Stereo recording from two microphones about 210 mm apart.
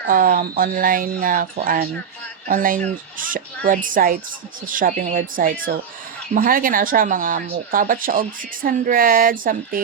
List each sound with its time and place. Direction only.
0.0 s speech: 40° right (ahead or behind)